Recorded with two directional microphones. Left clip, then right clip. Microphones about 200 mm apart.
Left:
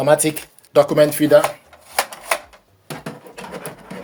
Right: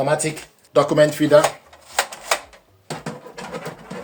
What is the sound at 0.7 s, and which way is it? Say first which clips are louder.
Speech: left 2 dB; 30° left (ahead or behind).